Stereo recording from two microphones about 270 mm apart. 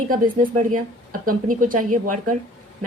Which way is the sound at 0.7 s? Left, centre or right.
Right.